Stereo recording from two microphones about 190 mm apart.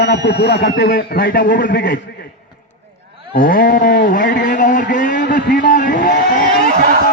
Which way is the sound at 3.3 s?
50° left (ahead or behind).